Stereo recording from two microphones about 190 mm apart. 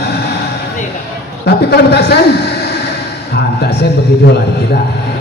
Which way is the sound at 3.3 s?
60° left (ahead or behind).